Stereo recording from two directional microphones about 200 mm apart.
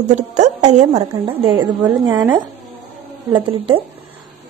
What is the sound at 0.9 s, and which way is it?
A woman's voice, 25° right (ahead or behind).